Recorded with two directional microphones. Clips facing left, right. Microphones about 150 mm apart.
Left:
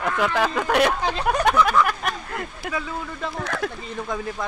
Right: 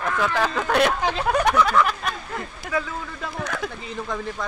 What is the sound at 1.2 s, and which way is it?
Speech, 15° left (ahead or behind).